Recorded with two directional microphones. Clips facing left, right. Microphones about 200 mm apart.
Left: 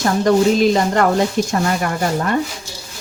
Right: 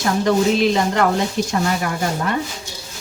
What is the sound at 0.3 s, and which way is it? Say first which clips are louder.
Speech: left 3 dB; 45° left (ahead or behind).